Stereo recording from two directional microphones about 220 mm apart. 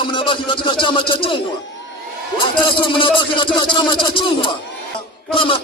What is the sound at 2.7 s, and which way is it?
A man's voice, 25° left (ahead or behind).